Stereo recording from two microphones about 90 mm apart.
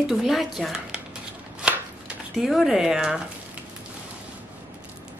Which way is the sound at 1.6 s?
10° right (ahead or behind).